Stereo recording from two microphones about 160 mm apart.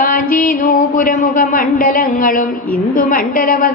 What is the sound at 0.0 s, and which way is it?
A woman's voice, 60° left (ahead or behind).